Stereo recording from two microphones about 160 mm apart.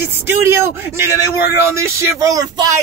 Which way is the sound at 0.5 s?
15° right (ahead or behind).